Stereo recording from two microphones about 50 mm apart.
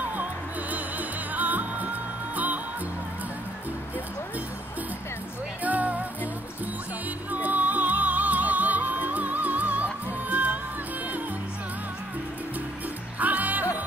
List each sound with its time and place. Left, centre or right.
0.1 s music: right
5.6 s music: right
7.2 s music: right
13.2 s music: right